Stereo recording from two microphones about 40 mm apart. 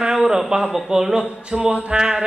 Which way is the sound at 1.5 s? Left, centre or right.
Right.